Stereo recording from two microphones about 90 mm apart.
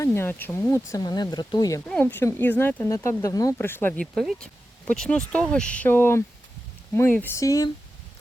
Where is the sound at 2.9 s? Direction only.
35° left (ahead or behind).